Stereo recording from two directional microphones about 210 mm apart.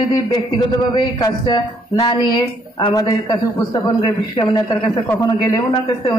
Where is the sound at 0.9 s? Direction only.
20° left (ahead or behind).